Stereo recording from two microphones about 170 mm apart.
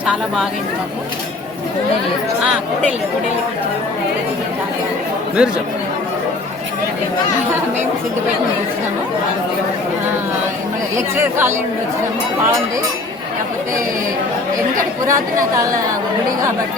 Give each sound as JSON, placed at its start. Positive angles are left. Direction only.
{"t": 0.0, "sound": "speech", "side_deg": -5}
{"t": 5.4, "sound": "speech", "side_deg": -5}
{"t": 15.0, "sound": "a woman's voice", "side_deg": -20}